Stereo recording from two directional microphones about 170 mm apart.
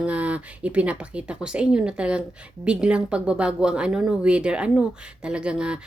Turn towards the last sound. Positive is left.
turn(degrees=-5)  # may be behind; listen again after turning